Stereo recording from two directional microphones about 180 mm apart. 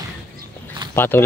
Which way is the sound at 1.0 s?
10° left (ahead or behind).